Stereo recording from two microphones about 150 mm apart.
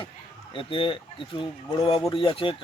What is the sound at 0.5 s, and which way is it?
Speech, 35° left (ahead or behind).